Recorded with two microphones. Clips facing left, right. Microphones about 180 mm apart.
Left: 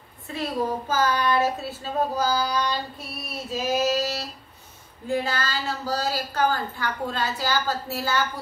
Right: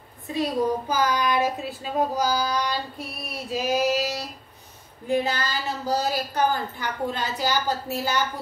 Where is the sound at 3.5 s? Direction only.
15° right (ahead or behind).